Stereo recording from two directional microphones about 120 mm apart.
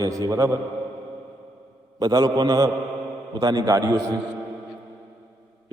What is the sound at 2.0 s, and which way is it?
A man's voice, 35° right (ahead or behind).